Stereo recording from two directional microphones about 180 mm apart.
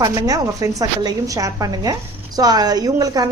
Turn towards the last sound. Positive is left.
turn(degrees=-20)  # may be behind; listen again after turning